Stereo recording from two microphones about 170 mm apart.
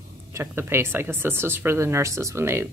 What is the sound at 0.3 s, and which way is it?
A woman's voice, 15° right (ahead or behind).